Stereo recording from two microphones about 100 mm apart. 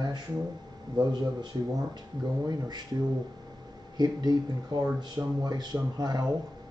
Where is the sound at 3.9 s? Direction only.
45° right (ahead or behind).